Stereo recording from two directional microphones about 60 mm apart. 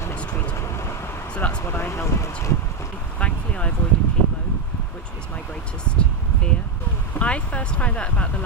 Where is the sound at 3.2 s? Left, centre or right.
Left.